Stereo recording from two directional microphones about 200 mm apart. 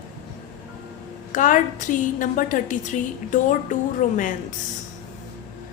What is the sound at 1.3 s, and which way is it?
A woman's voice, 40° left (ahead or behind).